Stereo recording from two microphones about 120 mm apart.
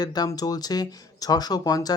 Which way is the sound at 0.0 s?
35° left (ahead or behind).